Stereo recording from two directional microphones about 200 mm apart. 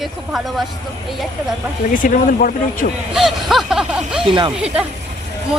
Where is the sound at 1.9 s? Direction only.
45° left (ahead or behind).